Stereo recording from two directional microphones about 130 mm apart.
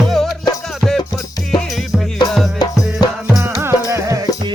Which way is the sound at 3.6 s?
20° right (ahead or behind).